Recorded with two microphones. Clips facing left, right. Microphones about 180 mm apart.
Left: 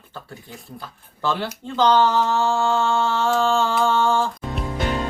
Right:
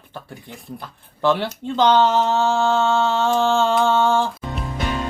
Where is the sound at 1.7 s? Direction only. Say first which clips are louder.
Right 1 dB; 20° right (ahead or behind).